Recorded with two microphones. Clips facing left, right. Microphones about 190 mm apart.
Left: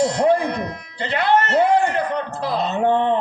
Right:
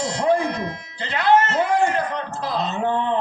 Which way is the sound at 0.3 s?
60° left (ahead or behind).